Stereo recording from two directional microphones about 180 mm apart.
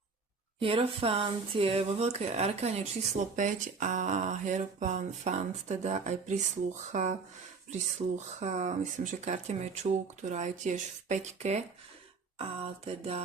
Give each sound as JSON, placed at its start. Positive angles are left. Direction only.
{"t": 0.6, "sound": "speech", "side_deg": -30}